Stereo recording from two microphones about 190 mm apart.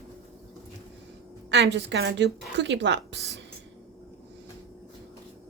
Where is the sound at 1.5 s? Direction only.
65° right (ahead or behind).